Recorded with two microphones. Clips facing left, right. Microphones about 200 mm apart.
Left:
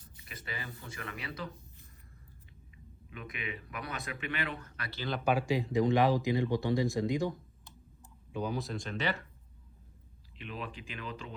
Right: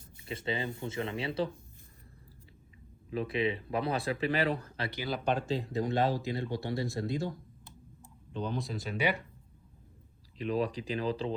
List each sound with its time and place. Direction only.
0.3 s speech: 25° right (ahead or behind)
3.1 s speech: 30° right (ahead or behind)
5.0 s speech: 5° left (ahead or behind)
8.3 s speech: 10° left (ahead or behind); by 9.2 s 10° right (ahead or behind)
10.3 s speech: 40° right (ahead or behind)